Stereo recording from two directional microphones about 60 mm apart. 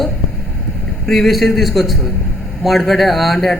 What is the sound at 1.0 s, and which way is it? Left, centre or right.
Speech, centre.